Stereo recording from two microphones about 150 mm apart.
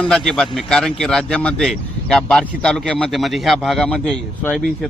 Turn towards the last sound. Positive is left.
turn(degrees=5)  # may be behind; listen again after turning